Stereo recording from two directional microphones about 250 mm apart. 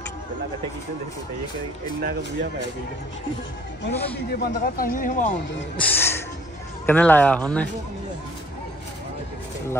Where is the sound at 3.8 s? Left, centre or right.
Left.